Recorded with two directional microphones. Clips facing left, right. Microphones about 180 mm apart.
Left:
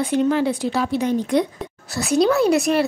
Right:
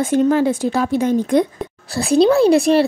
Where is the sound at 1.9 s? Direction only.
30° right (ahead or behind).